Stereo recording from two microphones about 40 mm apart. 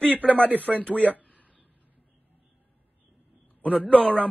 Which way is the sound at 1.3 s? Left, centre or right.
Left.